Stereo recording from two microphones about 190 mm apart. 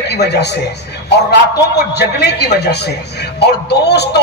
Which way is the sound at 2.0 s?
60° left (ahead or behind).